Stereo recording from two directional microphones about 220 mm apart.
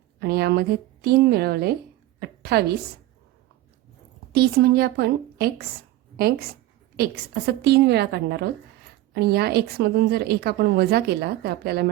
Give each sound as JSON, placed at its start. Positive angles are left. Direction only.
{"t": 0.2, "sound": "a woman's voice", "side_deg": -45}
{"t": 2.1, "sound": "a sound", "side_deg": -45}
{"t": 4.3, "sound": "a woman's voice", "side_deg": -45}
{"t": 6.9, "sound": "a woman's voice", "side_deg": -45}